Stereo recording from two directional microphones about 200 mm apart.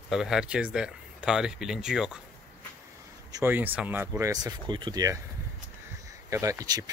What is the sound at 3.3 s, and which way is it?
Speech, 15° right (ahead or behind).